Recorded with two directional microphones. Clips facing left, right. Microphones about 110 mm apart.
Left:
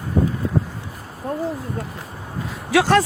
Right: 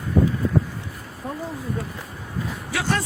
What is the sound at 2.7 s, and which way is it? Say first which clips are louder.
Speech: left 10 dB; 90° left.